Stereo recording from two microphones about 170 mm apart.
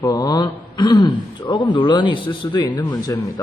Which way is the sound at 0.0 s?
25° left (ahead or behind).